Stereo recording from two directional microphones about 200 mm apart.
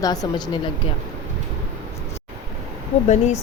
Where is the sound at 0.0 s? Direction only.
20° left (ahead or behind).